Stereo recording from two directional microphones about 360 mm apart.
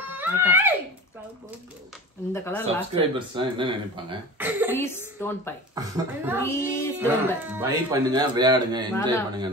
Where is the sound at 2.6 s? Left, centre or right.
Centre.